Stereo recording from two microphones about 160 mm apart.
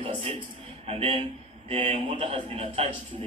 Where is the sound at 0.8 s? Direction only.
40° right (ahead or behind).